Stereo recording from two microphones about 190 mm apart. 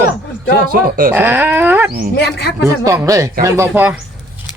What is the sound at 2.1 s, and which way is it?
Speech, 60° left (ahead or behind).